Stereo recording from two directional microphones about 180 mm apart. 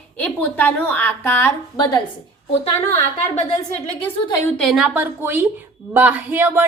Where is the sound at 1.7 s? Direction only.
25° left (ahead or behind).